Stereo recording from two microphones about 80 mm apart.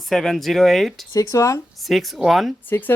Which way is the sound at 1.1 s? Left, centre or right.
Left.